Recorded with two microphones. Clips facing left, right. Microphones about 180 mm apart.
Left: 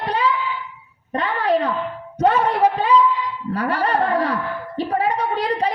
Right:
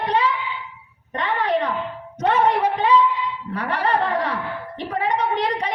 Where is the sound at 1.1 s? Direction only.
35° left (ahead or behind).